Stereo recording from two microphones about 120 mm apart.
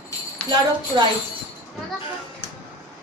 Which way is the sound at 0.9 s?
50° right (ahead or behind).